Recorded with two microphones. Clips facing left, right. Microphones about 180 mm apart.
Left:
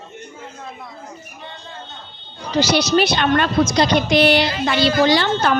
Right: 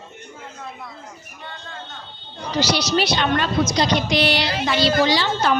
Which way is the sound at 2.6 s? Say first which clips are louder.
Left 4 dB; 50° left (ahead or behind).